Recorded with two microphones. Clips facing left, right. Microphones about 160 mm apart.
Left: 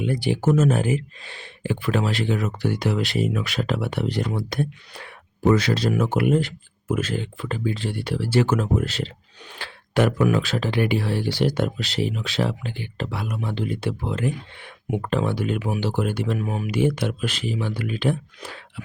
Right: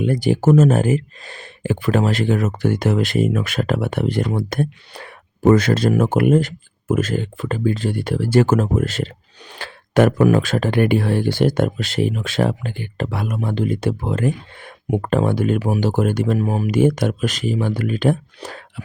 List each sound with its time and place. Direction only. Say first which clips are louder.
0.0 s speech: right 5 dB; 45° right (ahead or behind)